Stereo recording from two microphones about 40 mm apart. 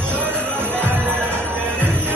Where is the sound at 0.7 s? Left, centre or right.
Right.